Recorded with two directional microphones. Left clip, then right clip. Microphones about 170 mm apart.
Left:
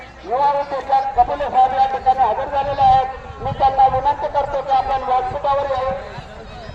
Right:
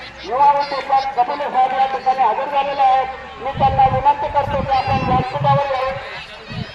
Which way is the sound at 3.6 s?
10° right (ahead or behind).